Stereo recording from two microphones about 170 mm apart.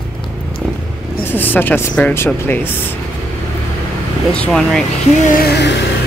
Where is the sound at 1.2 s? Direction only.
10° left (ahead or behind).